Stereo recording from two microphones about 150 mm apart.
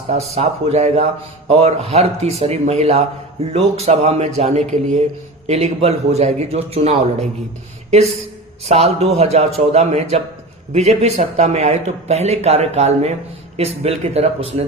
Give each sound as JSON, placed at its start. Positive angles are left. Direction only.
{"t": 0.3, "sound": "speech", "side_deg": -45}
{"t": 8.6, "sound": "speech", "side_deg": -45}